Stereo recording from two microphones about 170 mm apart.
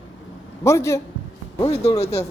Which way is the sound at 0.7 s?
15° left (ahead or behind).